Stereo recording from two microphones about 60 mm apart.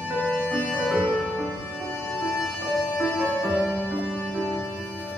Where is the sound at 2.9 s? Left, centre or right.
Left.